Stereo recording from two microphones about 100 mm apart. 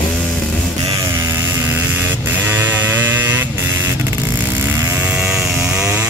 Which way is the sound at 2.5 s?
20° right (ahead or behind).